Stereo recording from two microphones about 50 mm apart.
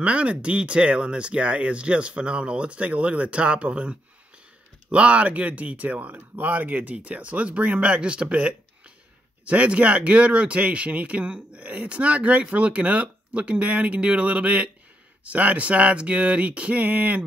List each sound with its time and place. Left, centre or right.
0.0 s speech: right